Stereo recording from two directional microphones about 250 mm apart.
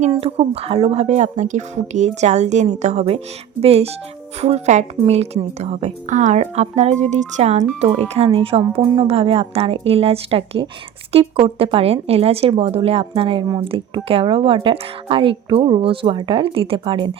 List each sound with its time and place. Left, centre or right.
0.0 s a woman's voice: right